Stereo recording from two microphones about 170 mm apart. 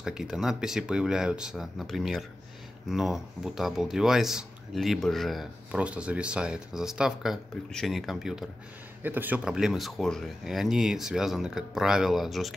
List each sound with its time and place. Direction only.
0.0 s speech: 5° right (ahead or behind)